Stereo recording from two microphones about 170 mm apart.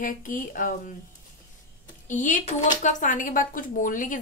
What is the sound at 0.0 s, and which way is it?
Speech, 55° left (ahead or behind).